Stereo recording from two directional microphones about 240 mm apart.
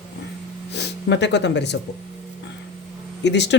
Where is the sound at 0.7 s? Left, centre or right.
Left.